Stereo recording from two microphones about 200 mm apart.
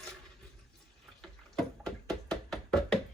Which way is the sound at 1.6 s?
Centre (ahead or behind).